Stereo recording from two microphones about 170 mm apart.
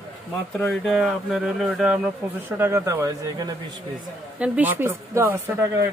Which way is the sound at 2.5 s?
15° right (ahead or behind).